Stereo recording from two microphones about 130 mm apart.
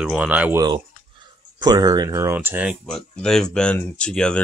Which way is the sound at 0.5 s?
30° right (ahead or behind).